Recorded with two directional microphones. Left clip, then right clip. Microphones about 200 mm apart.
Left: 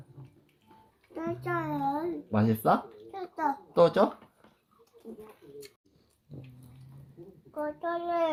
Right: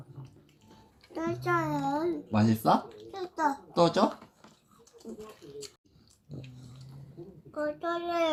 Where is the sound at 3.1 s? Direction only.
5° left (ahead or behind).